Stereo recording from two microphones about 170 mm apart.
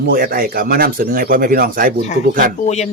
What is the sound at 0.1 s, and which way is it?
Speech, 60° right (ahead or behind).